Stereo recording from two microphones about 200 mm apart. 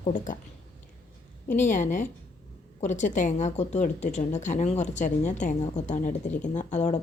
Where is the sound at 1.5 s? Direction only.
40° left (ahead or behind).